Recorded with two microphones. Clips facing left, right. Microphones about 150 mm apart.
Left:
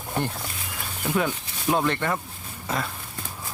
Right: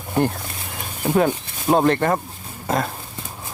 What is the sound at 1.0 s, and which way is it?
Speech, 45° right (ahead or behind).